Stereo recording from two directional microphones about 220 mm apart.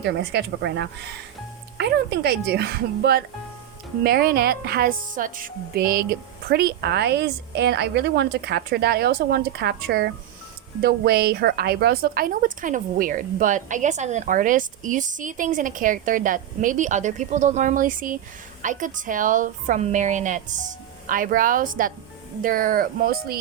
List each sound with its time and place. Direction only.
0.0 s a woman's voice: 50° right (ahead or behind)